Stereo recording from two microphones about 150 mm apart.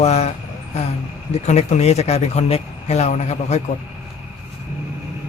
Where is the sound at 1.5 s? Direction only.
45° left (ahead or behind).